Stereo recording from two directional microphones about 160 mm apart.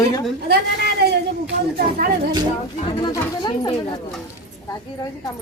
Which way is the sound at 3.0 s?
25° left (ahead or behind).